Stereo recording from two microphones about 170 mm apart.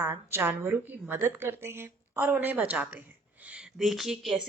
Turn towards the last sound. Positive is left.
turn(degrees=0)  # may be behind; listen again after turning